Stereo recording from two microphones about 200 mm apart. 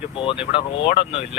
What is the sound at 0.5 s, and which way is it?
Speech, 30° left (ahead or behind).